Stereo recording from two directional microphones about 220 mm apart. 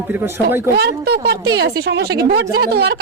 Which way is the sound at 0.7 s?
45° right (ahead or behind).